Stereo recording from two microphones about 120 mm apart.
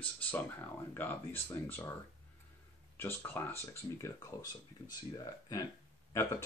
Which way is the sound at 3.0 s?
20° left (ahead or behind).